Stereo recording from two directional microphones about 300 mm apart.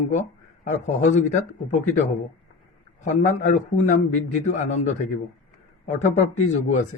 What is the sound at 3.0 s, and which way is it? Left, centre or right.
A man's voice, left.